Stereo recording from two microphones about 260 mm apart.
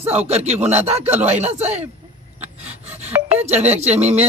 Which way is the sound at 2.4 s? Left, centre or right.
Right.